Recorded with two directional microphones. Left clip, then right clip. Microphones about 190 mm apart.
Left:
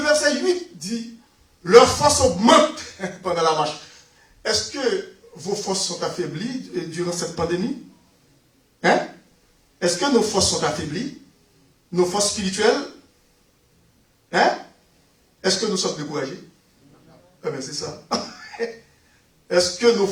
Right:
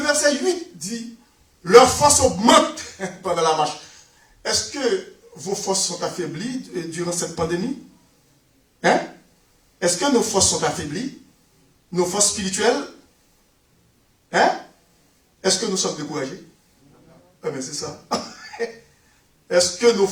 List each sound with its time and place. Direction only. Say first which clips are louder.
0.0 s a sound: even; 25° right (ahead or behind)
1.6 s a man's voice: right 1 dB; 25° right (ahead or behind)
10.0 s a man's voice: even; 25° right (ahead or behind)
15.4 s a man's voice: even; 25° right (ahead or behind)
17.4 s a man's voice: even; 25° right (ahead or behind)